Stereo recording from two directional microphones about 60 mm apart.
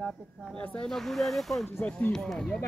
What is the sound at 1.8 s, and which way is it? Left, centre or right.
Speech, left.